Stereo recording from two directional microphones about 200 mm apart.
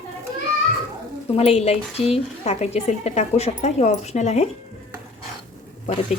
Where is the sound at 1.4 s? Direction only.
30° left (ahead or behind).